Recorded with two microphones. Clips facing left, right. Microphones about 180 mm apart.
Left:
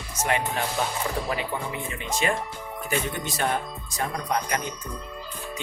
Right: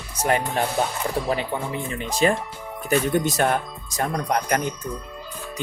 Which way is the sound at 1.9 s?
35° right (ahead or behind).